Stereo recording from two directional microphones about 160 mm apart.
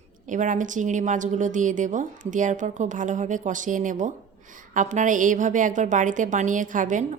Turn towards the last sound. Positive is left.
turn(degrees=-50)  # may be behind; listen again after turning